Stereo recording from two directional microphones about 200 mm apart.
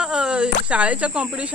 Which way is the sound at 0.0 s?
5° right (ahead or behind).